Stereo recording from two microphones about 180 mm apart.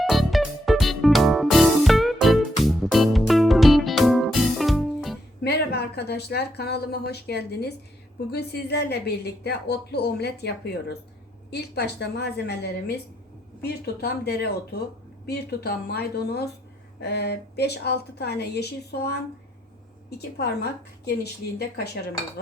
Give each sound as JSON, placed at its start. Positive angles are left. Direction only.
{"t": 0.0, "sound": "music", "side_deg": 0}
{"t": 5.4, "sound": "a woman's voice", "side_deg": 65}
{"t": 20.1, "sound": "speech", "side_deg": 65}